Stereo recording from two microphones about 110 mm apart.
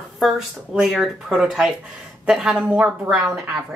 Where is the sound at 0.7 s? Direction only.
Centre (ahead or behind).